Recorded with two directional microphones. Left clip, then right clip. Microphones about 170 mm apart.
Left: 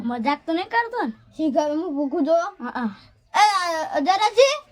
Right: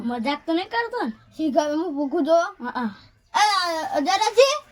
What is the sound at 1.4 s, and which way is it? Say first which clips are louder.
Speech: even; 10° left (ahead or behind).